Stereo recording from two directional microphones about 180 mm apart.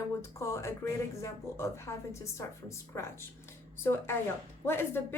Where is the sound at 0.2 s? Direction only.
15° left (ahead or behind).